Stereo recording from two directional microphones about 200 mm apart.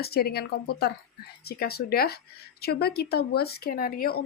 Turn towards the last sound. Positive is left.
turn(degrees=45)  # may be behind; listen again after turning